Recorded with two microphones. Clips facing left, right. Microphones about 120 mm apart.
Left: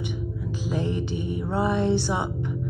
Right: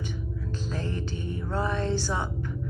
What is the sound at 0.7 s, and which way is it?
Music, 15° left (ahead or behind).